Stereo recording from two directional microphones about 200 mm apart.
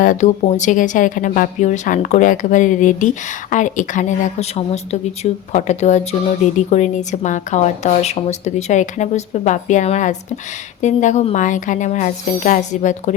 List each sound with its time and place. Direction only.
0.0 s a woman's voice: 40° left (ahead or behind)